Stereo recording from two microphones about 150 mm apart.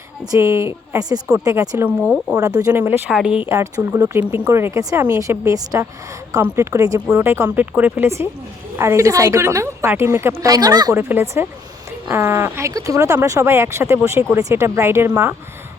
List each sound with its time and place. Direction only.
0.3 s a woman's voice: 20° right (ahead or behind)
2.0 s speech: centre (ahead or behind)
2.6 s a woman's voice: 25° right (ahead or behind)
2.8 s speech: 5° right (ahead or behind)
3.5 s a woman's voice: 20° right (ahead or behind)